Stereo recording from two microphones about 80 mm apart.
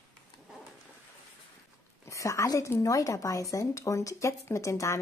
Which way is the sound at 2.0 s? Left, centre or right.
Left.